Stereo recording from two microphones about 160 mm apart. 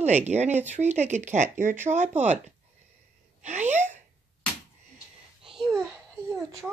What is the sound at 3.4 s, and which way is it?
Speech, 45° right (ahead or behind).